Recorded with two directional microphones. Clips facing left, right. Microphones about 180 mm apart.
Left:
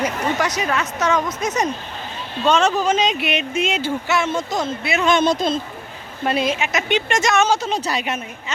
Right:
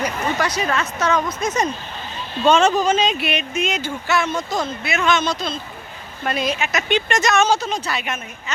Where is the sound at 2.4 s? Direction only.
Centre (ahead or behind); by 5.1 s 30° left (ahead or behind).